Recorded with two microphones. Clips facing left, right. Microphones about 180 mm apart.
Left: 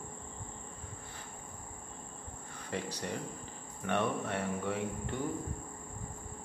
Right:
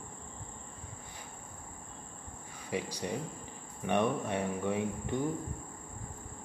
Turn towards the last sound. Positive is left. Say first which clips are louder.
# right 3 dB
turn(degrees=-15)  # may be behind; listen again after turning